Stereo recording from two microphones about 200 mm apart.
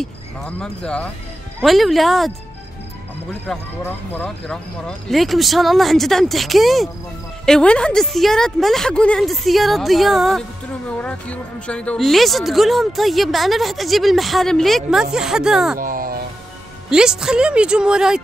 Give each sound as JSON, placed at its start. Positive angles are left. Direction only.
{"t": 0.6, "sound": "a woman's voice", "side_deg": 5}
{"t": 3.5, "sound": "a woman's voice", "side_deg": 0}
{"t": 15.8, "sound": "music", "side_deg": -45}
{"t": 16.9, "sound": "a woman's voice", "side_deg": -5}